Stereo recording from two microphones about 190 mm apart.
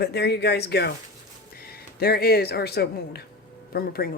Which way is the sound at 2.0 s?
55° left (ahead or behind).